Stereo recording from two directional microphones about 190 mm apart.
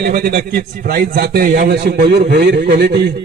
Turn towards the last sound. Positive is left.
turn(degrees=-60)  # may be behind; listen again after turning